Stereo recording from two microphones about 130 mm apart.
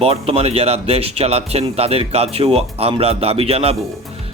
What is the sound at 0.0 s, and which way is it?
Speech, 50° right (ahead or behind).